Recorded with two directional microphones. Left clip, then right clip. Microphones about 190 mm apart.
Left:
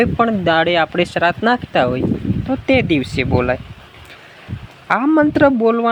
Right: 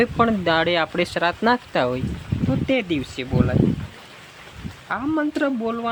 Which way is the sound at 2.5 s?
25° left (ahead or behind).